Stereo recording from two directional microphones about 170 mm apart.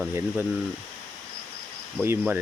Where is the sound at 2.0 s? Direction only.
15° right (ahead or behind).